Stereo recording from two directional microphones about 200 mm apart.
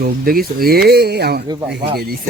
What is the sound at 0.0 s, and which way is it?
Speech, 50° right (ahead or behind).